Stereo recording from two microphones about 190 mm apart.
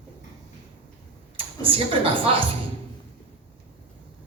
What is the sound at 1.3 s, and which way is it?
A woman's voice, 30° right (ahead or behind).